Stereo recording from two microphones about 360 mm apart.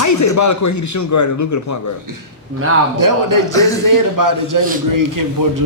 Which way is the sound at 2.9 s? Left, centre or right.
Right.